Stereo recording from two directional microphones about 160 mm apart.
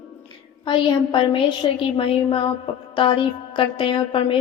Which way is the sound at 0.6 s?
30° left (ahead or behind).